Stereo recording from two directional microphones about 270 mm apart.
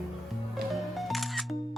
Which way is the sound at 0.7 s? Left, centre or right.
Centre.